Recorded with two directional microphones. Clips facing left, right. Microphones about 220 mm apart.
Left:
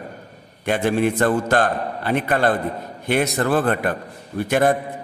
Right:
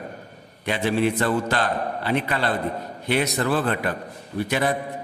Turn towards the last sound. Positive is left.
turn(degrees=50)  # may be behind; listen again after turning